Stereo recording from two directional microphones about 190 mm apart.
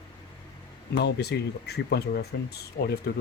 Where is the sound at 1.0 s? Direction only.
60° left (ahead or behind).